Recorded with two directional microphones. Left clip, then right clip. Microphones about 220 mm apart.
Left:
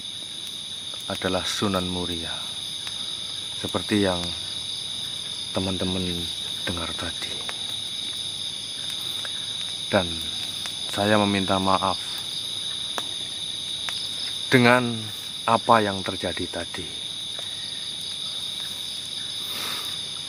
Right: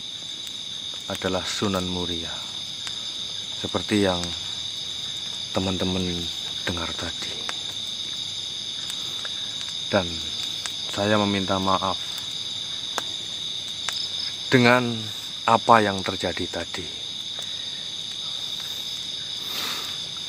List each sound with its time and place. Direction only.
1.2 s speech: 5° right (ahead or behind)
3.7 s speech: 10° right (ahead or behind)
5.5 s speech: 20° right (ahead or behind)
9.9 s speech: centre (ahead or behind)
14.5 s speech: 5° right (ahead or behind)
15.4 s speech: 15° right (ahead or behind)